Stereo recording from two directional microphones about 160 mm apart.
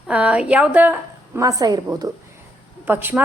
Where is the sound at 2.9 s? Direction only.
10° right (ahead or behind).